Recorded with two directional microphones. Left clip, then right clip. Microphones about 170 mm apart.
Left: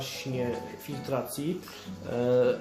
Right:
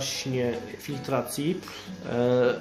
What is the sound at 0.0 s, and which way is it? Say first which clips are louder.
Speech: right 4 dB; 20° right (ahead or behind).